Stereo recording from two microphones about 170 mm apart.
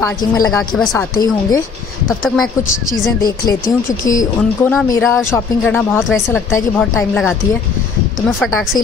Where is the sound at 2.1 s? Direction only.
Centre (ahead or behind).